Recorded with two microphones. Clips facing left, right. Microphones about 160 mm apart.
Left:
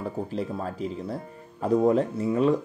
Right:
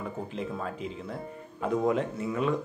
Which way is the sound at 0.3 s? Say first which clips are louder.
Left 4 dB; 35° left (ahead or behind).